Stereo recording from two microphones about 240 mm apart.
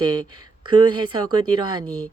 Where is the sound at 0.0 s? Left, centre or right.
Centre.